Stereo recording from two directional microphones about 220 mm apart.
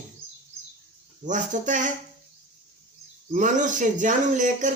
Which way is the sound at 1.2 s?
35° right (ahead or behind).